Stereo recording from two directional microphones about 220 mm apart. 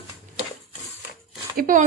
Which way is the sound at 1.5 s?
40° right (ahead or behind).